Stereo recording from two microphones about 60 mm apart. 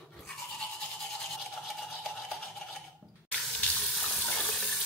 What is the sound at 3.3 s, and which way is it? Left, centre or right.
Water tap, centre.